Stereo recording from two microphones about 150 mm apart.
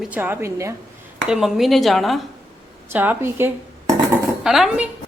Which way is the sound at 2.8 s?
15° right (ahead or behind).